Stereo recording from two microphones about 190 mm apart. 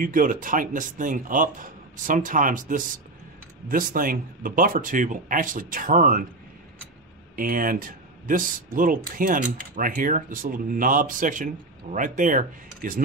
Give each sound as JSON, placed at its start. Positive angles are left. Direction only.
{"t": 0.0, "sound": "speech", "side_deg": -45}
{"t": 7.3, "sound": "speech", "side_deg": -45}